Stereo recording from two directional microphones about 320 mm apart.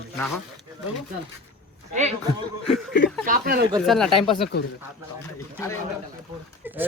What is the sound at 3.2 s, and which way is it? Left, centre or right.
Speech, right.